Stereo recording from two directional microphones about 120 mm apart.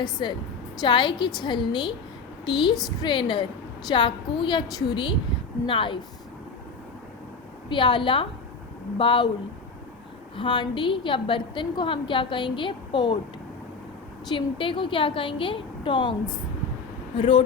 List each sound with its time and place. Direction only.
0.0 s a woman's voice: 40° left (ahead or behind)
7.7 s a woman's voice: 45° left (ahead or behind)
10.3 s a woman's voice: 40° left (ahead or behind)
14.3 s a woman's voice: 45° left (ahead or behind)
17.2 s a woman's voice: 45° left (ahead or behind)